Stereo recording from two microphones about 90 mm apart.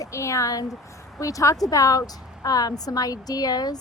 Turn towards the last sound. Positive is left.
turn(degrees=45)  # may be behind; listen again after turning